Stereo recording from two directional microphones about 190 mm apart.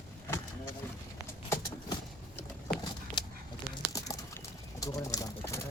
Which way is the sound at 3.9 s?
15° left (ahead or behind).